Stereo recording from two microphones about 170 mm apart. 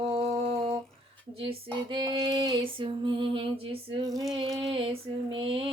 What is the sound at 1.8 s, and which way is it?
Female singing, 30° right (ahead or behind).